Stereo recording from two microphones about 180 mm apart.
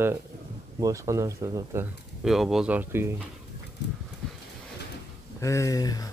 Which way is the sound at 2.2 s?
Centre (ahead or behind).